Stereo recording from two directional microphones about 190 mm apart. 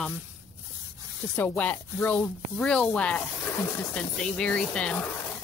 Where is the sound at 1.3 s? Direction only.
10° left (ahead or behind).